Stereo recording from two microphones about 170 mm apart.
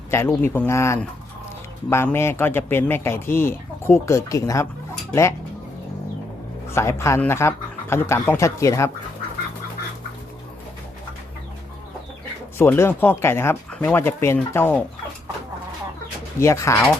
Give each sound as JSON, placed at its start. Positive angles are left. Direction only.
{"t": 0.1, "sound": "speech", "side_deg": 15}
{"t": 6.7, "sound": "speech", "side_deg": 15}
{"t": 12.5, "sound": "speech", "side_deg": 15}
{"t": 16.4, "sound": "speech", "side_deg": 15}